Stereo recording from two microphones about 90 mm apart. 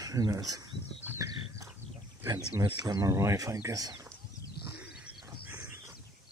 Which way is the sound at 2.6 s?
50° right (ahead or behind).